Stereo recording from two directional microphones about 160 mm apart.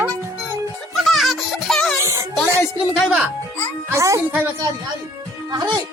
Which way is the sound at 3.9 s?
20° right (ahead or behind).